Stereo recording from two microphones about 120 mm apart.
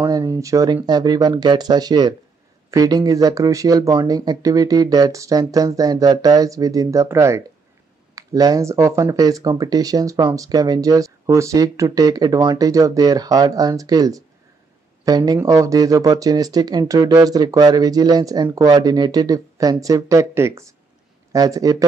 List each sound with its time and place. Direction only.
0.2 s speech: 25° right (ahead or behind)